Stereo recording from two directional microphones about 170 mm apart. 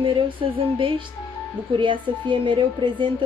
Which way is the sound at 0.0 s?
30° right (ahead or behind).